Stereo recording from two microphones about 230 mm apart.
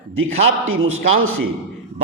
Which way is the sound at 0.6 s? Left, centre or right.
Right.